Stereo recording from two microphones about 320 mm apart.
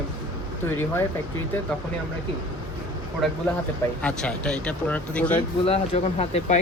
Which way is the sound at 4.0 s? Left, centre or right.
Centre.